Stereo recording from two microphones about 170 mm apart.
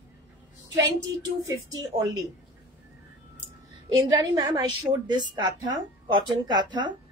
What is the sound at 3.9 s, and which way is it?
A woman's voice, 25° right (ahead or behind).